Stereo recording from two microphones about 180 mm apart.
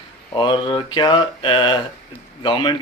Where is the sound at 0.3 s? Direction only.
25° left (ahead or behind).